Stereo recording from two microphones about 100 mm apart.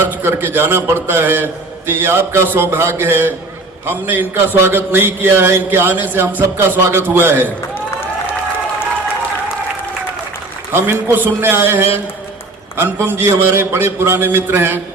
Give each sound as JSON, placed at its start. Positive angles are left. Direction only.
{"t": 0.1, "sound": "speech", "side_deg": -25}
{"t": 10.7, "sound": "a man's voice", "side_deg": -20}